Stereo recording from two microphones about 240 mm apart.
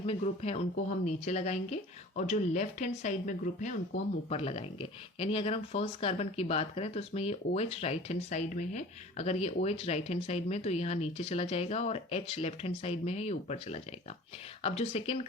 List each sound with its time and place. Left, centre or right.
0.0 s speech: left